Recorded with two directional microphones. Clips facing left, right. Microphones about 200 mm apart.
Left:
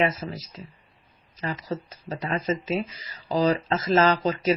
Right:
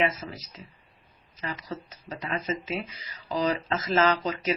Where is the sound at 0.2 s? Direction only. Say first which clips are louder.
Left 5 dB; 40° left (ahead or behind).